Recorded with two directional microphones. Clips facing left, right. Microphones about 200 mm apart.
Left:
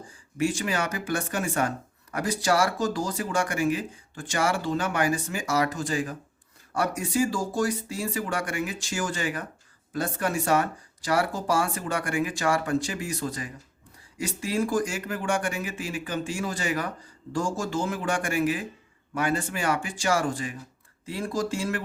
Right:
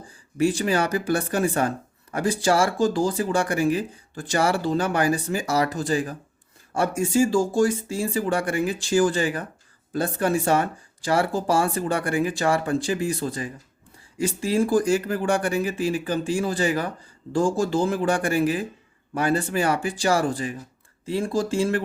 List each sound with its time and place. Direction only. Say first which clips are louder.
0.3 s speech: right 5 dB; 35° right (ahead or behind)